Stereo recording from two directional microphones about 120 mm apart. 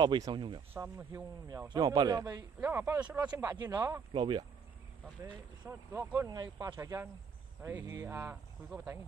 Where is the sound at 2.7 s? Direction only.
20° right (ahead or behind).